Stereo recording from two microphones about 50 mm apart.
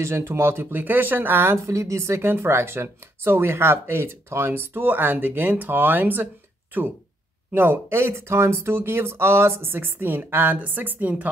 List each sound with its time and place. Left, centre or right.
0.0 s speech: right
1.7 s speech: right
2.2 s speech: right
7.5 s speech: right